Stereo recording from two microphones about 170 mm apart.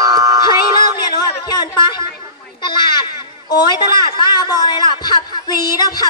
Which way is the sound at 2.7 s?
25° left (ahead or behind).